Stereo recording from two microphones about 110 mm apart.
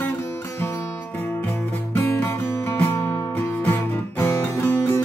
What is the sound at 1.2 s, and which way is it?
Music, 20° left (ahead or behind).